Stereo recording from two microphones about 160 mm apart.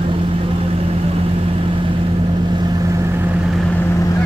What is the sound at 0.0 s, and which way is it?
Vehicle, 35° right (ahead or behind).